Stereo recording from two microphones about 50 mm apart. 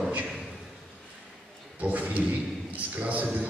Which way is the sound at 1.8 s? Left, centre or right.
Right.